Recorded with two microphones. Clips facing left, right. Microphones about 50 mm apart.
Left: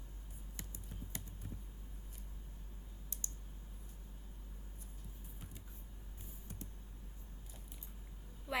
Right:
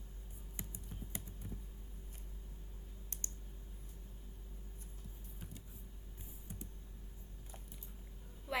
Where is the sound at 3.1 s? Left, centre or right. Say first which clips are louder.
Right 1 dB; right.